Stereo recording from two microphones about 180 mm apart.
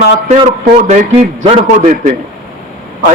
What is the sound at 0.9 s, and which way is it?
A man's voice, 40° right (ahead or behind).